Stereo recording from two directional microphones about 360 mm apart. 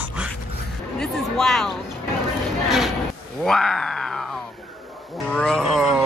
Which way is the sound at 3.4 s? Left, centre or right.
Centre.